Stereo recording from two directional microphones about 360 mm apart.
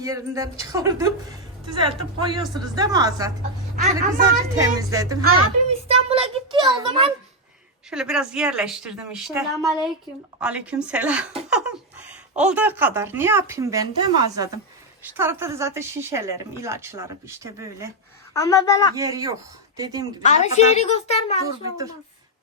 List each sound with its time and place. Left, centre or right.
0.0 s speech: centre
3.8 s a woman's voice: right
4.2 s speech: centre
5.2 s a woman's voice: right
5.9 s a sound: centre
7.9 s speech: centre
18.3 s a child's voice: centre
18.9 s speech: centre
20.3 s a child's voice: centre